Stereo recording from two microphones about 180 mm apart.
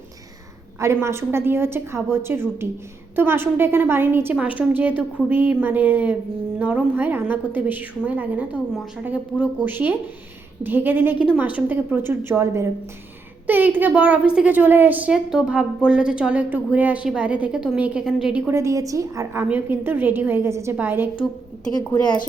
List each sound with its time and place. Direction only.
0.8 s a woman's voice: 15° right (ahead or behind)
21.7 s a woman's voice: 20° left (ahead or behind)